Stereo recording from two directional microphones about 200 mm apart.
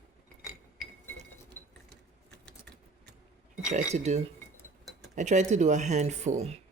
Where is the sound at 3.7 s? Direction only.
35° right (ahead or behind).